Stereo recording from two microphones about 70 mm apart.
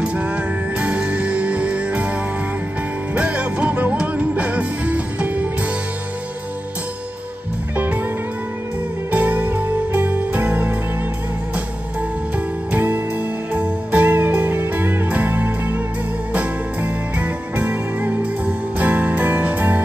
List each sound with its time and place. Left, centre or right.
0.0 s music: centre
3.2 s music: centre
7.7 s music: right
9.1 s music: right
12.7 s music: right